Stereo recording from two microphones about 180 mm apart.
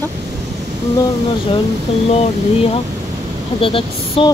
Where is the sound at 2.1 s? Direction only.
35° left (ahead or behind).